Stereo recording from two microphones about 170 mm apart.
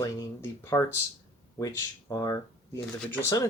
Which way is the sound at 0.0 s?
20° left (ahead or behind).